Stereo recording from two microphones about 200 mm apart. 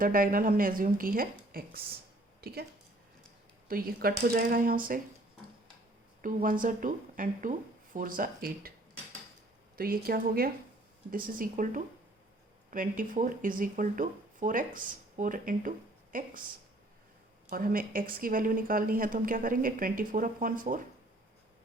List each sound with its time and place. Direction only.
0.0 s a woman's voice: 45° right (ahead or behind)
3.7 s a woman's voice: 45° right (ahead or behind)
6.2 s a woman's voice: 45° right (ahead or behind)
9.7 s a woman's voice: 50° right (ahead or behind)
17.5 s a woman's voice: 45° right (ahead or behind)